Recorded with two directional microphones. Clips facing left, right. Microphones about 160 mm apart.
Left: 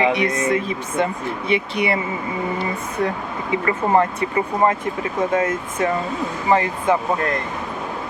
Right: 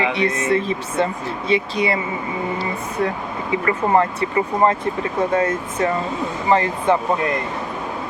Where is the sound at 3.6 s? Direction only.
20° left (ahead or behind).